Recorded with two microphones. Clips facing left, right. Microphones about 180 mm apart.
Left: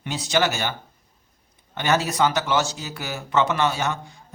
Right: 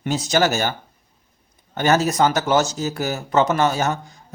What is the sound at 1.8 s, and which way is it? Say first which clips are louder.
A man's voice: right 4 dB; 45° right (ahead or behind).